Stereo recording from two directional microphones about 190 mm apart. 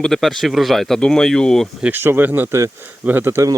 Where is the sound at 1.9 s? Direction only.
10° right (ahead or behind).